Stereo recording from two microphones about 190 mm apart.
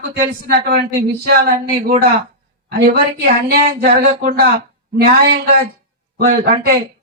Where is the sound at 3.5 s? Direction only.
55° right (ahead or behind).